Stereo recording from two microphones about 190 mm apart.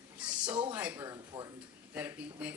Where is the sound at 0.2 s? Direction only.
5° right (ahead or behind).